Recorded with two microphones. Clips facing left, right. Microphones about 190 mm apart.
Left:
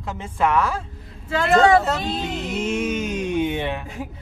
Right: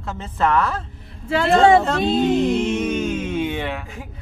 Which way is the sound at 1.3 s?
30° right (ahead or behind).